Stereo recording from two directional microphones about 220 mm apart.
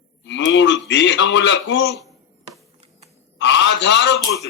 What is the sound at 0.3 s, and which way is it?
A man's voice, 55° left (ahead or behind).